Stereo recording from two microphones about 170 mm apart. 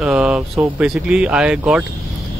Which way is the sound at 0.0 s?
5° right (ahead or behind).